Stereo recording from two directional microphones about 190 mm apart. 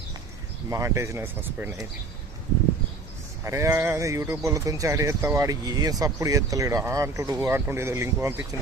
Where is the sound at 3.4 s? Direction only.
15° right (ahead or behind).